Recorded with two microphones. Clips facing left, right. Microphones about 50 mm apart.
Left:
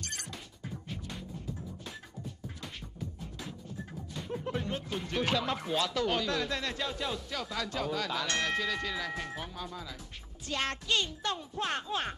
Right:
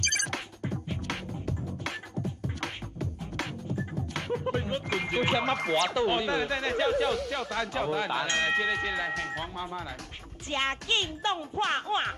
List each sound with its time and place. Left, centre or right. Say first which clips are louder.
0.0 s music: right 11 dB; right
2.6 s beatboxing: right 7 dB; right
4.6 s a child's voice: right 5 dB; right
5.4 s speech: right 5 dB; right
5.9 s a child's voice: right 4 dB; right
7.1 s speech: right 8 dB; right
7.7 s a child's voice: right 4 dB; right
9.1 s speech: right 5 dB; right
9.4 s a child's voice: right 5 dB; right